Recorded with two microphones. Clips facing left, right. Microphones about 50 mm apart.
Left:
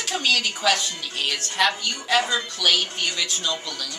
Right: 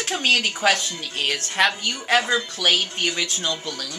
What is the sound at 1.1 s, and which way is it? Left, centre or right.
Speech, right.